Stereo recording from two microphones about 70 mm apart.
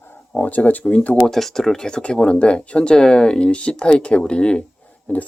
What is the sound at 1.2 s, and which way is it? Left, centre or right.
Speech, centre.